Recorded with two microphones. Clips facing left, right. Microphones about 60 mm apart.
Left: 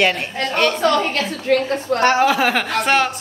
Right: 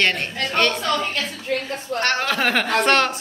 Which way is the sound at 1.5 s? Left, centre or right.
Left.